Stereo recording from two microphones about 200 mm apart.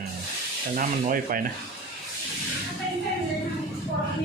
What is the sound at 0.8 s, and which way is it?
Speech, 45° right (ahead or behind).